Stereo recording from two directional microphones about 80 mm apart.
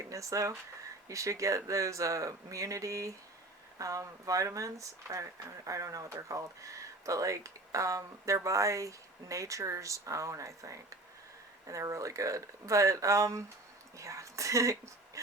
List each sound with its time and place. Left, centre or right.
0.1 s speech: right